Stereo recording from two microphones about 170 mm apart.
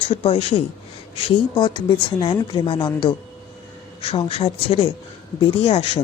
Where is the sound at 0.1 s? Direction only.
35° left (ahead or behind).